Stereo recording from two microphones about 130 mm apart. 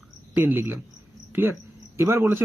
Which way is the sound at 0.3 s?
20° right (ahead or behind).